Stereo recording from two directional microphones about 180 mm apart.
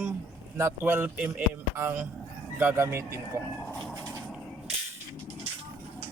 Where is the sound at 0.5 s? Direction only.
15° right (ahead or behind).